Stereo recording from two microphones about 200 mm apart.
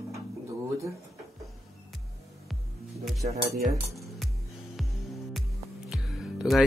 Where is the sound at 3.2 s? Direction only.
40° right (ahead or behind).